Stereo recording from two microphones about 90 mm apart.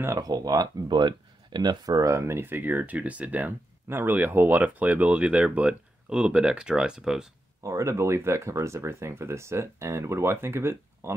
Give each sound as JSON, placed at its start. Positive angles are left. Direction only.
{"t": 0.2, "sound": "speech", "side_deg": -45}
{"t": 7.6, "sound": "speech", "side_deg": -35}